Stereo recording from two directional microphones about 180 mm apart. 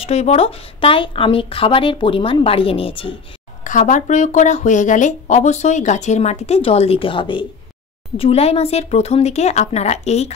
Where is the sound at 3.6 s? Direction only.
45° left (ahead or behind).